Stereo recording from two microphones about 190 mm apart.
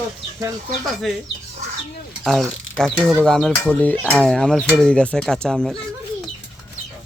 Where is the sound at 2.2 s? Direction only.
Centre (ahead or behind).